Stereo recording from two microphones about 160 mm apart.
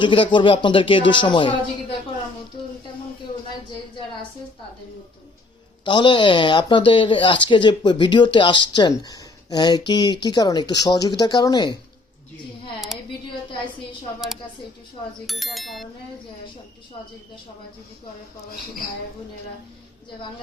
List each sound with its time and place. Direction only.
0.0 s speech: 30° left (ahead or behind)
5.8 s speech: 30° left (ahead or behind)
12.9 s a sound: centre (ahead or behind)
15.3 s speech: centre (ahead or behind)